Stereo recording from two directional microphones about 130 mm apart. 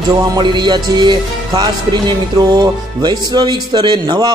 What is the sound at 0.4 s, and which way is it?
Speech, 35° right (ahead or behind).